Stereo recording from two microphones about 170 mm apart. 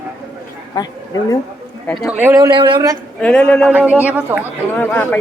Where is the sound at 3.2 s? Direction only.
5° left (ahead or behind).